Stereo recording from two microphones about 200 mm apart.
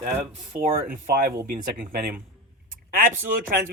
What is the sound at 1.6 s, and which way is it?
Speech, 45° right (ahead or behind).